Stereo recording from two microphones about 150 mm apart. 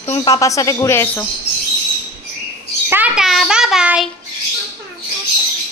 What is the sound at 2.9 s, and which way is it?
Speech, 10° right (ahead or behind).